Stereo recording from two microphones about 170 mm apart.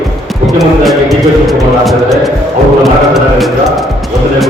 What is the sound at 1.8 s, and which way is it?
Music, centre (ahead or behind).